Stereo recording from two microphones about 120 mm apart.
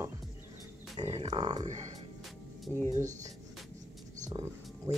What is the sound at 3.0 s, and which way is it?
Speech, 90° right.